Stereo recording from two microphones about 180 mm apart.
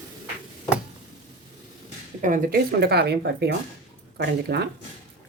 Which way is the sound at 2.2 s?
50° right (ahead or behind).